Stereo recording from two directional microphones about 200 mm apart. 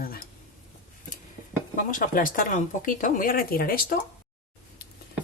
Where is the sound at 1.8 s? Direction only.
45° left (ahead or behind).